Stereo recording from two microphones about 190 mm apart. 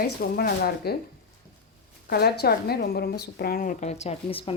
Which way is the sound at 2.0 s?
55° left (ahead or behind).